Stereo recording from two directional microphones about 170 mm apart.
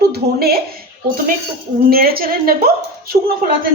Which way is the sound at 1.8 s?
60° right (ahead or behind).